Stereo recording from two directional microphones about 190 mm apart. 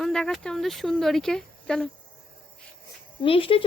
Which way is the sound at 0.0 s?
5° left (ahead or behind).